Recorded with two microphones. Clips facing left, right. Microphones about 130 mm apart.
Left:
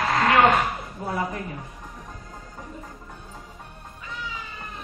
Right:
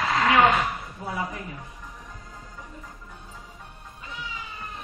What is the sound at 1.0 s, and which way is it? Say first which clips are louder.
Speech: left 4 dB; 40° left (ahead or behind).